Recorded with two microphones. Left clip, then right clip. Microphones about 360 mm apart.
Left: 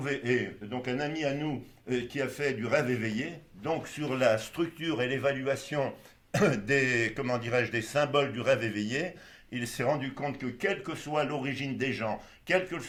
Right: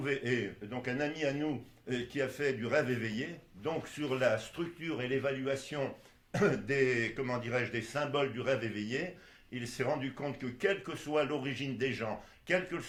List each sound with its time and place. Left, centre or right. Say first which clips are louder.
0.0 s speech: left 4 dB; centre